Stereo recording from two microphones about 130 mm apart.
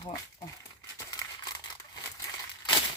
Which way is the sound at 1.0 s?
30° left (ahead or behind).